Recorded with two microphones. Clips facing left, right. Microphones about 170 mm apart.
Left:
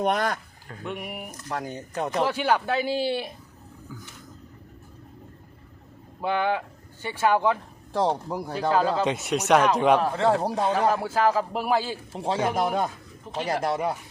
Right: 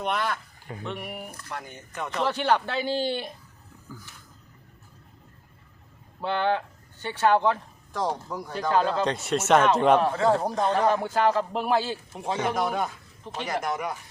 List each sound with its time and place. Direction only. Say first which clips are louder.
0.0 s speech: left 4 dB; 45° left (ahead or behind)
0.9 s speech: left 2 dB; 10° left (ahead or behind)
1.5 s speech: left 6 dB; 40° left (ahead or behind)
2.2 s speech: right 1 dB; 10° left (ahead or behind)
6.2 s speech: even; 10° left (ahead or behind)
7.9 s speech: left 4 dB; 30° left (ahead or behind)
8.7 s a man's voice: even; 5° left (ahead or behind)
12.1 s speech: left 3 dB; 30° left (ahead or behind)